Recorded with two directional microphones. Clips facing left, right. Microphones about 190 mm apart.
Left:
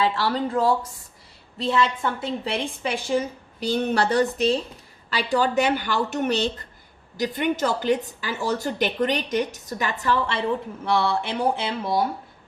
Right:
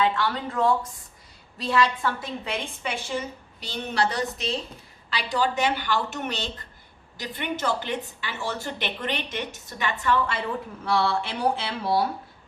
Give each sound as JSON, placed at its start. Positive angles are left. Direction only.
{"t": 0.0, "sound": "speech", "side_deg": 35}
{"t": 2.4, "sound": "speech", "side_deg": 35}
{"t": 10.8, "sound": "speech", "side_deg": 20}